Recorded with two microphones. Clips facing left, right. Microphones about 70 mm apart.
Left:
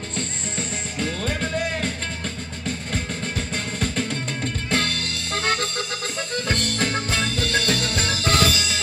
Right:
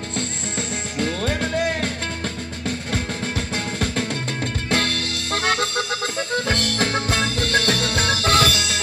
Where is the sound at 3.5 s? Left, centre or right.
Right.